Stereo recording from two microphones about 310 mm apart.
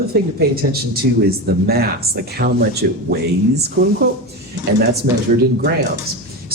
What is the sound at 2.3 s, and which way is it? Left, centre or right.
Speech, right.